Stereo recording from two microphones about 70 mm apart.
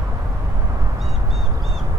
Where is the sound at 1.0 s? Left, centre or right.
Centre.